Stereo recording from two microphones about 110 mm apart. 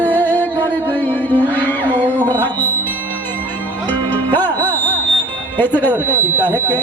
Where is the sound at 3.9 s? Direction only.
15° left (ahead or behind).